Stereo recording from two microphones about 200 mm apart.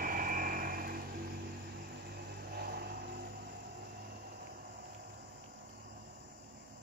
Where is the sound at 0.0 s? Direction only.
45° right (ahead or behind).